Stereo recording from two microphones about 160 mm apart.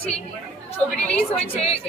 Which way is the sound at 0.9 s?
5° left (ahead or behind).